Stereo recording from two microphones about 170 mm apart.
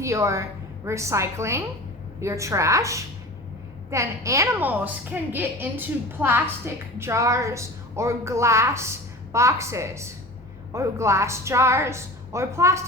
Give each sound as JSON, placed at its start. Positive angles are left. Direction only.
{"t": 0.0, "sound": "a woman's voice", "side_deg": -15}